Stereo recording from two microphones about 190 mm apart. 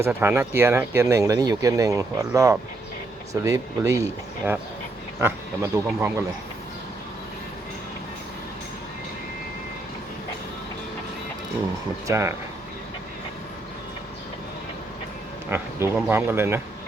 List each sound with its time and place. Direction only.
0.2 s speech: 10° right (ahead or behind)
12.0 s speech: 15° right (ahead or behind)
15.4 s speech: 10° right (ahead or behind)